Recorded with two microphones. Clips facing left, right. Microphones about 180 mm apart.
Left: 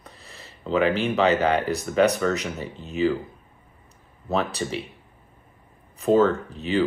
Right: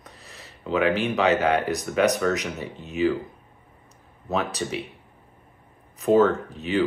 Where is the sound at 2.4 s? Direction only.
35° left (ahead or behind).